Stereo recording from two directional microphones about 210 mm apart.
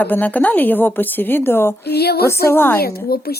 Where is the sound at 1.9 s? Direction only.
50° left (ahead or behind).